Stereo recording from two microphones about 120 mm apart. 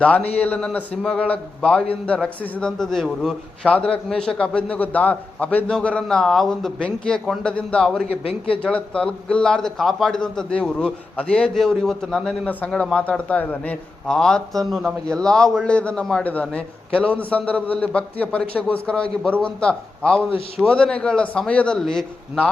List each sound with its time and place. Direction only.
0.3 s a man's voice: 15° left (ahead or behind)
8.1 s a man's voice: 55° left (ahead or behind)
8.6 s a man's voice: 10° left (ahead or behind)